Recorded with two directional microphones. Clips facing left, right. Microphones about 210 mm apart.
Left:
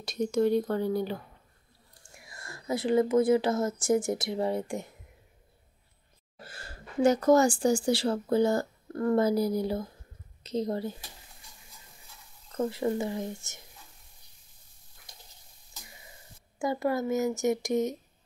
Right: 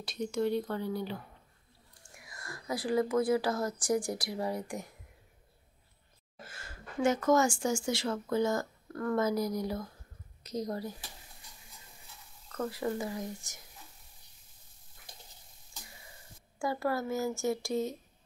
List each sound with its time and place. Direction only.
0.0 s speech: 45° left (ahead or behind)
2.1 s speech: 25° left (ahead or behind)
6.4 s speech: 35° left (ahead or behind)
12.4 s speech: 25° left (ahead or behind)
16.5 s speech: 20° left (ahead or behind)